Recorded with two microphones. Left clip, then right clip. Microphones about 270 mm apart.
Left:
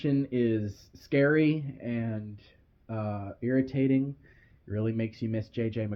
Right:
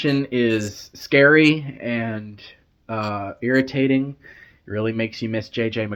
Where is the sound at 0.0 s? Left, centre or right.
Centre.